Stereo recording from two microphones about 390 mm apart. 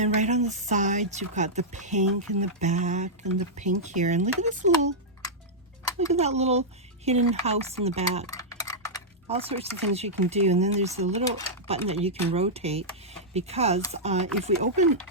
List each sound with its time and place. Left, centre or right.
0.0 s speech: centre
6.1 s speech: centre
8.3 s typing: centre
9.2 s speech: centre